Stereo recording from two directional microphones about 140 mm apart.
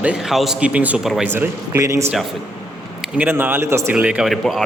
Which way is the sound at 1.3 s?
15° right (ahead or behind).